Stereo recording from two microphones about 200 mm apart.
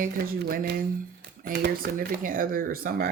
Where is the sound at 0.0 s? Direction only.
50° right (ahead or behind).